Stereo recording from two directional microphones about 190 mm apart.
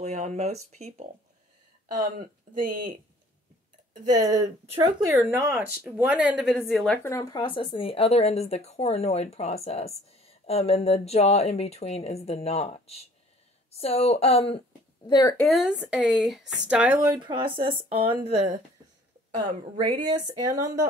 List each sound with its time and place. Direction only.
0.0 s speech: 35° right (ahead or behind)
4.2 s a woman's voice: 15° right (ahead or behind); by 15.3 s 20° left (ahead or behind)
15.3 s speech: centre (ahead or behind)
17.1 s speech: 20° right (ahead or behind)
19.3 s speech: 20° right (ahead or behind)